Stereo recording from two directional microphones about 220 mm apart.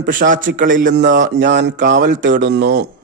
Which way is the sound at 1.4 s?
55° right (ahead or behind).